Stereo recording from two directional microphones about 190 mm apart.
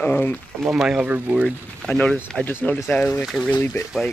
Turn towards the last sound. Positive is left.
turn(degrees=20)  # may be behind; listen again after turning